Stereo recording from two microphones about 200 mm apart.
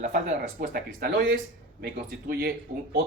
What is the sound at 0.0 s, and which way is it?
Speech, 40° right (ahead or behind).